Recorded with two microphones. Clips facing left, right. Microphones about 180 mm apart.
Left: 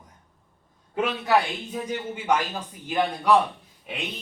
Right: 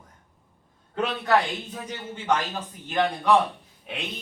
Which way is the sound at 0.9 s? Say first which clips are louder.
Even; 10° left (ahead or behind).